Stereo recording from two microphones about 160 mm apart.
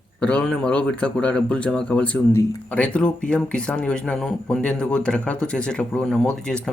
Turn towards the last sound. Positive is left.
turn(degrees=5)  # may be behind; listen again after turning